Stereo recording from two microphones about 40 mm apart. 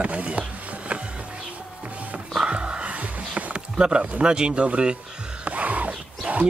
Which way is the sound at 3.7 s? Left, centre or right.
Right.